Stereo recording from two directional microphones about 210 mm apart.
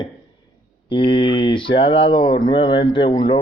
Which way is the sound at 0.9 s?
25° left (ahead or behind).